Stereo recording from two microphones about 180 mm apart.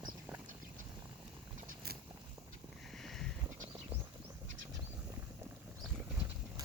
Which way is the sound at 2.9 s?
Centre (ahead or behind).